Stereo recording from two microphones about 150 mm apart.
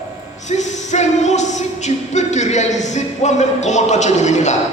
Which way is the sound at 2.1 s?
50° left (ahead or behind).